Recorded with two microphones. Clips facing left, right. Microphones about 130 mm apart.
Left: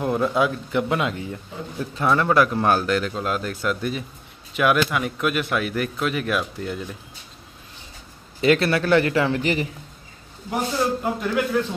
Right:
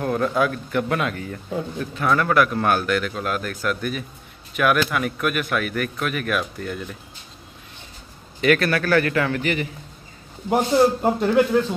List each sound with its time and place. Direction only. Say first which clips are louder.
0.0 s a man's voice: even; 15° left (ahead or behind)
8.4 s a man's voice: even; 25° left (ahead or behind)
10.5 s a man's voice: right 6 dB; 40° right (ahead or behind)